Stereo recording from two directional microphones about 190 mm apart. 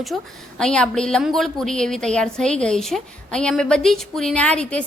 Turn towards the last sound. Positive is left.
turn(degrees=5)  # may be behind; listen again after turning